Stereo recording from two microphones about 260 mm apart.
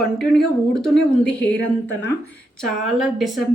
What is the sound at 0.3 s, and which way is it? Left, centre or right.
Speech, centre.